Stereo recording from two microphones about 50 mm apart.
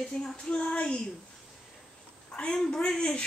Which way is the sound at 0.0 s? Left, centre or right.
Centre.